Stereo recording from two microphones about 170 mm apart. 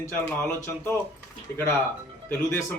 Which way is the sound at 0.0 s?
15° left (ahead or behind).